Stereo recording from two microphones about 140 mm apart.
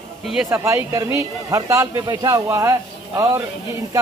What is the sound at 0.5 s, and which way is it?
Speech, 20° right (ahead or behind).